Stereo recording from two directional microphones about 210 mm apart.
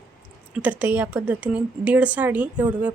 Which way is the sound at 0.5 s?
5° right (ahead or behind).